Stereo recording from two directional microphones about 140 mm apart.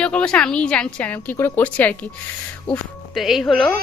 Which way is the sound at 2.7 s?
Centre (ahead or behind).